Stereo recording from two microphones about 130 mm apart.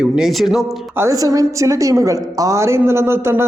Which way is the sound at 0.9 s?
25° right (ahead or behind).